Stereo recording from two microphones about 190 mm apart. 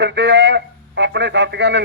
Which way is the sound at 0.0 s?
65° right (ahead or behind).